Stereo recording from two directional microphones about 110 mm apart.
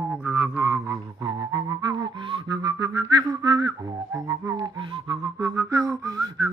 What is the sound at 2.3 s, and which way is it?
Whistling, 35° right (ahead or behind).